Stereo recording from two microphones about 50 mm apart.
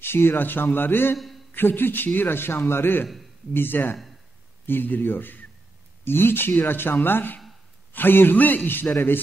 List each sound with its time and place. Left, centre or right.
0.0 s a man's voice: left
1.1 s a man's voice: centre
1.5 s a man's voice: left